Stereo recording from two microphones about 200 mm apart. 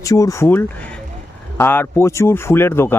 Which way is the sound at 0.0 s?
15° left (ahead or behind).